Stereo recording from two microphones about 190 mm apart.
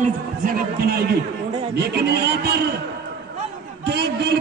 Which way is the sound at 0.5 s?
55° right (ahead or behind).